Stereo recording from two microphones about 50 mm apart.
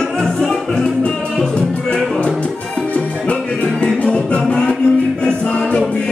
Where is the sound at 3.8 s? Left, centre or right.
Left.